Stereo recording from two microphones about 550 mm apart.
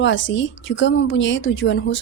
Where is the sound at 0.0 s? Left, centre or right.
Centre.